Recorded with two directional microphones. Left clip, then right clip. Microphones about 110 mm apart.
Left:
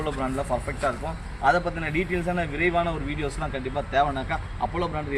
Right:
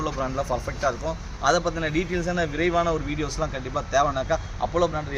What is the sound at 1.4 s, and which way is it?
A man's voice, 25° right (ahead or behind).